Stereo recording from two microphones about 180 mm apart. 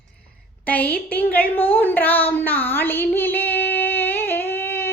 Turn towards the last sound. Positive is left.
turn(degrees=10)  # may be behind; listen again after turning